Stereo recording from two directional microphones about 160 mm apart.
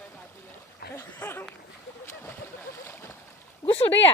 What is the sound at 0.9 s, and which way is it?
Speech, 15° left (ahead or behind).